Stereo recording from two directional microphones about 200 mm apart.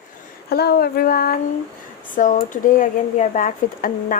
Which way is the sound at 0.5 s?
50° left (ahead or behind).